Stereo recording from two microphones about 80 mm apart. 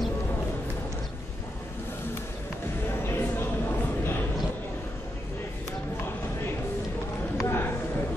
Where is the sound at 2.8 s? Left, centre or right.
Left.